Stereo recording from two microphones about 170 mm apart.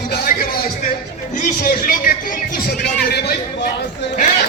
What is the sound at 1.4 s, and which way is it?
Speech, 55° left (ahead or behind).